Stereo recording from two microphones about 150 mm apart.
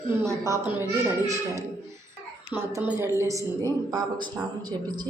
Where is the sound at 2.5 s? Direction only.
20° right (ahead or behind).